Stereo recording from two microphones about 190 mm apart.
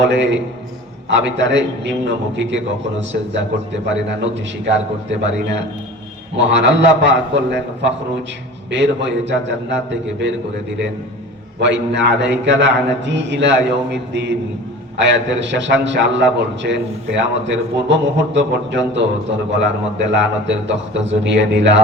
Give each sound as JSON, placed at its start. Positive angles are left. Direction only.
{"t": 0.0, "sound": "a man's voice", "side_deg": -70}
{"t": 4.2, "sound": "a man's voice", "side_deg": -70}
{"t": 6.3, "sound": "a man's voice", "side_deg": -70}
{"t": 11.6, "sound": "a man's voice", "side_deg": -70}